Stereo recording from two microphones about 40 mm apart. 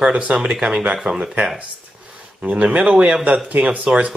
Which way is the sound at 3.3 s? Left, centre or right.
Right.